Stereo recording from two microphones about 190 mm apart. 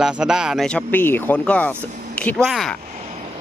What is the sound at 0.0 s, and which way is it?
Speech, 5° right (ahead or behind).